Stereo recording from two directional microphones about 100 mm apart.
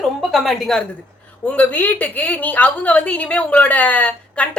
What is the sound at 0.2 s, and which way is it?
Speech, centre (ahead or behind).